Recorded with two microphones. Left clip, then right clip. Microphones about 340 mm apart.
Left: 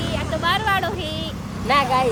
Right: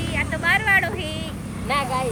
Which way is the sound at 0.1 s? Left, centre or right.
Centre.